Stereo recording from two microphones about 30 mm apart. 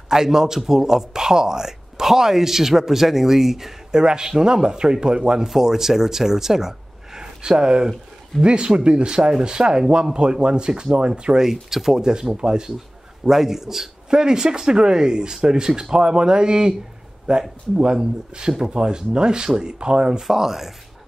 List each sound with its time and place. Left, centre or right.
0.1 s speech: centre
3.9 s speech: right
5.6 s speech: centre
7.2 s speech: right
11.7 s speech: centre
12.0 s speech: right
13.2 s speech: centre
14.1 s speech: right
20.2 s speech: centre